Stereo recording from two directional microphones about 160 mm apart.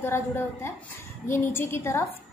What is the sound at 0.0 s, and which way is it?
A woman's voice, 15° left (ahead or behind).